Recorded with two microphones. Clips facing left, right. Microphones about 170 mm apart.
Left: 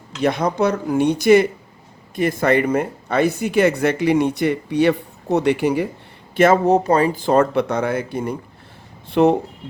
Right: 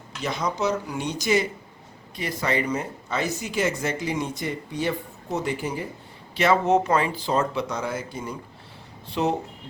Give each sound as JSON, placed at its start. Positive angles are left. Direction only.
{"t": 0.2, "sound": "speech", "side_deg": 55}
{"t": 6.3, "sound": "speech", "side_deg": 50}
{"t": 6.7, "sound": "speech", "side_deg": 35}